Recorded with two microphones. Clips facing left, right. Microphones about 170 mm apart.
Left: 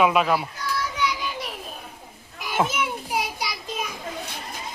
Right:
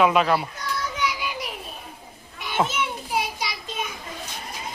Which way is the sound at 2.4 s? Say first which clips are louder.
Even; 5° left (ahead or behind).